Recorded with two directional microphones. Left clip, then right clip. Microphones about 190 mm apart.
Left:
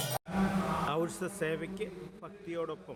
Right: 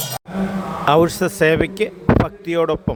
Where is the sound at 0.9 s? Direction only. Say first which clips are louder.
Right 19 dB; 45° right (ahead or behind).